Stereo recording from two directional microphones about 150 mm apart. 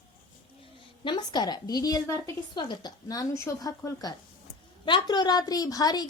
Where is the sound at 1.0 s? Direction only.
30° left (ahead or behind).